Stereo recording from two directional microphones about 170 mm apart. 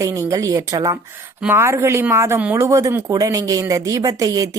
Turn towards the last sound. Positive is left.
turn(degrees=-20)  # may be behind; listen again after turning